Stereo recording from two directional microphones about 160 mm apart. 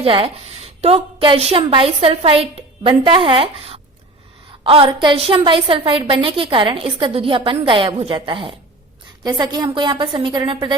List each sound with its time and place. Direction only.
0.0 s a woman's voice: 35° right (ahead or behind)